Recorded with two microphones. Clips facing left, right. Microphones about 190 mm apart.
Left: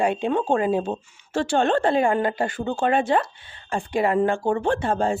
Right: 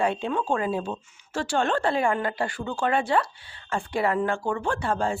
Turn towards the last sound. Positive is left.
turn(degrees=20)  # may be behind; listen again after turning